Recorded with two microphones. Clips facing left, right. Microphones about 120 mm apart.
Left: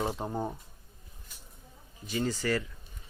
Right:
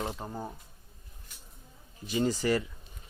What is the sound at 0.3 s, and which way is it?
Speech, 20° left (ahead or behind).